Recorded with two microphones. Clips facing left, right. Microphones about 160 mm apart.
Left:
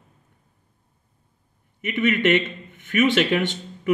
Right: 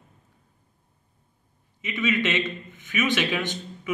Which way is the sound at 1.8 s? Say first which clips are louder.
Left 4 dB; 55° left (ahead or behind).